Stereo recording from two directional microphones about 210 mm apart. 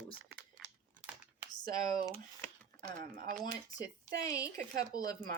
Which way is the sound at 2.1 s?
10° left (ahead or behind).